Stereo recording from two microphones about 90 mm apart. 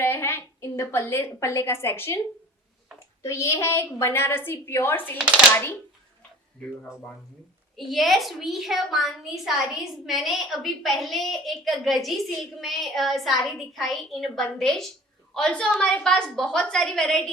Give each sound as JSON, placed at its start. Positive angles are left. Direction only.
{"t": 0.0, "sound": "a sound", "side_deg": 25}
{"t": 0.8, "sound": "a woman's voice", "side_deg": 30}
{"t": 3.2, "sound": "a woman's voice", "side_deg": 30}
{"t": 7.9, "sound": "a woman's voice", "side_deg": 0}